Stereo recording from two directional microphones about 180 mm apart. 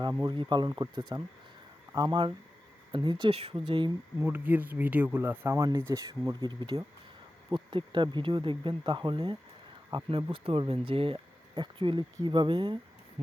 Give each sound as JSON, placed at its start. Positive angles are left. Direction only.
{"t": 0.0, "sound": "speech", "side_deg": -25}
{"t": 4.3, "sound": "speech", "side_deg": -10}